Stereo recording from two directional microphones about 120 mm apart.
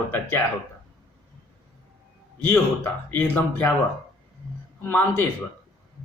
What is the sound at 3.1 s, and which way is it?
Speech, 15° left (ahead or behind).